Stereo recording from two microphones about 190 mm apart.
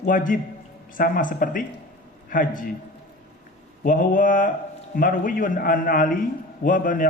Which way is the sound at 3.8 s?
45° left (ahead or behind).